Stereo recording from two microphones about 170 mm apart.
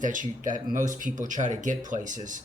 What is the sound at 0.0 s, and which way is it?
Speech, 50° right (ahead or behind).